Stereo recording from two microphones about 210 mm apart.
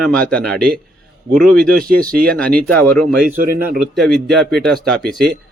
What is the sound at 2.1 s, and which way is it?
Speech, 45° right (ahead or behind).